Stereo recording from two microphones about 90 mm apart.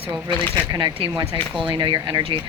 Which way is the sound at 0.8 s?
65° right (ahead or behind).